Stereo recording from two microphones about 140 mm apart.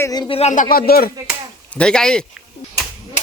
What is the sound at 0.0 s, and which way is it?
Speech, 25° left (ahead or behind).